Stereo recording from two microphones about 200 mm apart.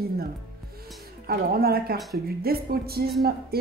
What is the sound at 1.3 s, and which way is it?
A woman's voice, 50° right (ahead or behind).